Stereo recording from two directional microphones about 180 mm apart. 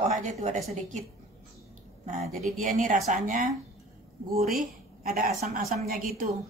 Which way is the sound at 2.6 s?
45° right (ahead or behind).